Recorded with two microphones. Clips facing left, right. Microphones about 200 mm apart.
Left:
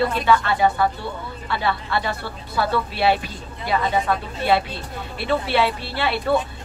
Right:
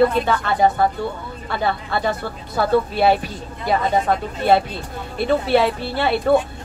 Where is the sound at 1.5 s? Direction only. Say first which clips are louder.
Right 2 dB; 45° right (ahead or behind).